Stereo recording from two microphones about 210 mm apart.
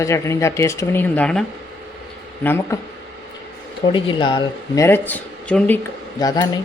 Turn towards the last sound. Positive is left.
turn(degrees=20)  # may be behind; listen again after turning